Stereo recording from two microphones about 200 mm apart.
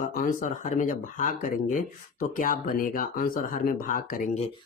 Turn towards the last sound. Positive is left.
turn(degrees=45)  # may be behind; listen again after turning